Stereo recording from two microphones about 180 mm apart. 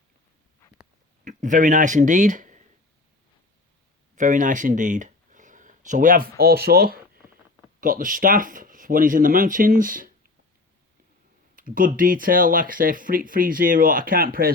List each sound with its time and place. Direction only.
1.2 s speech: 45° right (ahead or behind)
4.1 s speech: 45° right (ahead or behind)
11.5 s speech: 50° right (ahead or behind)